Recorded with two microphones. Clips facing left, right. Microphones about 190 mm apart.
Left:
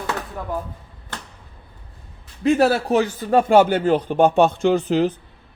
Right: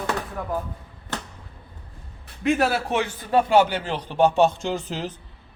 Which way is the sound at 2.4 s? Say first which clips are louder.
Left 5 dB; 35° left (ahead or behind).